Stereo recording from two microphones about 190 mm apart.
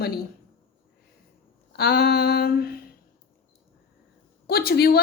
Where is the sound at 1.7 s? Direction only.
55° left (ahead or behind).